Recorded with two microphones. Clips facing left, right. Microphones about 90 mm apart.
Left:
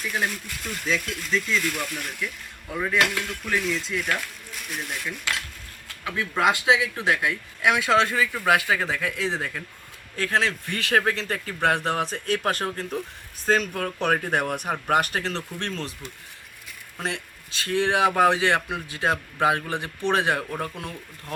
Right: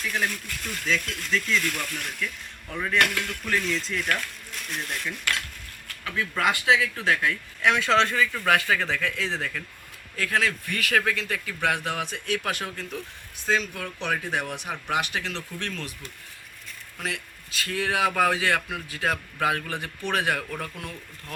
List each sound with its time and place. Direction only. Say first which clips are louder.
0.0 s speech: left 1 dB; 10° left (ahead or behind)
5.9 s a man's voice: left 1 dB; 20° left (ahead or behind)
17.0 s speech: left 3 dB; 25° left (ahead or behind)